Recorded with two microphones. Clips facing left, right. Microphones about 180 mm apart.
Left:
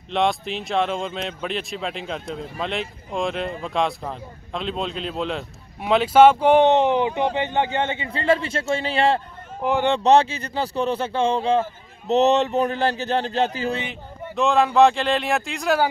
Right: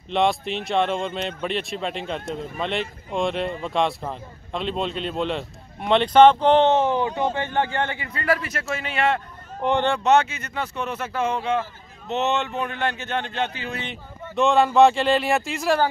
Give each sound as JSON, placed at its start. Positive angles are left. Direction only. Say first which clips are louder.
{"t": 0.1, "sound": "speech", "louder": "right 1 dB", "side_deg": 0}
{"t": 9.6, "sound": "speech", "louder": "even", "side_deg": 5}
{"t": 9.8, "sound": "speech", "louder": "left 4 dB", "side_deg": 30}
{"t": 14.3, "sound": "speech", "louder": "even", "side_deg": 0}